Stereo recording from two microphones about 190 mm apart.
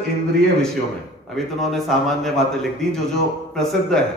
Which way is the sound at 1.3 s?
Centre (ahead or behind).